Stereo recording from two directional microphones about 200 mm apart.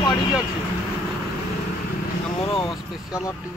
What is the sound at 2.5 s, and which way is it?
Vehicle, 25° left (ahead or behind).